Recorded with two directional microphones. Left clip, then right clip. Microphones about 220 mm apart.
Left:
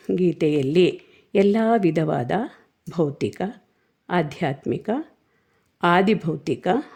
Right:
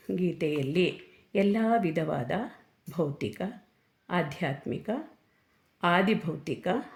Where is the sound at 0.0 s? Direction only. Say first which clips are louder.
Left 9 dB; 45° left (ahead or behind).